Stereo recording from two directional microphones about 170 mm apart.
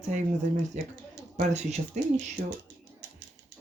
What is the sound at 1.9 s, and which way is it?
Speech, 45° right (ahead or behind).